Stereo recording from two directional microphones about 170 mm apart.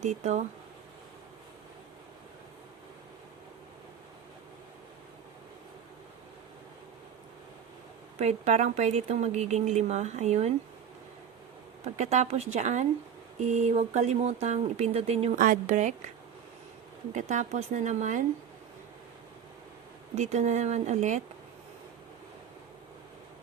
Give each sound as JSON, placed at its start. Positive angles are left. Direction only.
{"t": 0.0, "sound": "speech", "side_deg": -40}
{"t": 8.2, "sound": "a woman's voice", "side_deg": -40}
{"t": 11.9, "sound": "a woman's voice", "side_deg": -45}
{"t": 15.4, "sound": "speech", "side_deg": -50}
{"t": 17.1, "sound": "speech", "side_deg": -45}
{"t": 20.1, "sound": "speech", "side_deg": -45}